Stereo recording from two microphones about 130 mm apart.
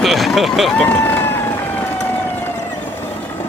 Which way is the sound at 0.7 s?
15° left (ahead or behind).